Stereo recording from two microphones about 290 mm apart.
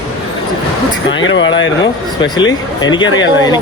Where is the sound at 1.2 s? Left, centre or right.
Left.